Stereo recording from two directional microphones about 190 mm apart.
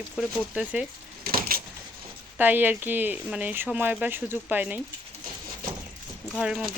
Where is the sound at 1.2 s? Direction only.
50° right (ahead or behind).